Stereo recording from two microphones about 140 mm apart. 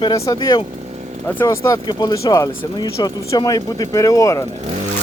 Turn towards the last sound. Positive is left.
turn(degrees=25)  # may be behind; listen again after turning